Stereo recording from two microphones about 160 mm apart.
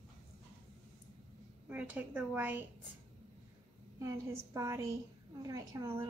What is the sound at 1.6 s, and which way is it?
A woman's voice, 10° right (ahead or behind).